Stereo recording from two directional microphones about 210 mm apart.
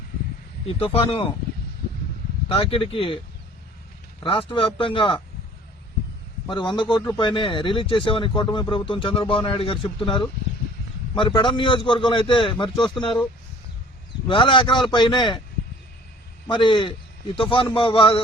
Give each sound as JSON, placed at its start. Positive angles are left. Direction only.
{"t": 0.7, "sound": "speech", "side_deg": 25}
{"t": 2.5, "sound": "speech", "side_deg": 25}
{"t": 4.2, "sound": "speech", "side_deg": 25}
{"t": 6.5, "sound": "speech", "side_deg": 20}
{"t": 14.3, "sound": "speech", "side_deg": 25}
{"t": 16.5, "sound": "speech", "side_deg": 25}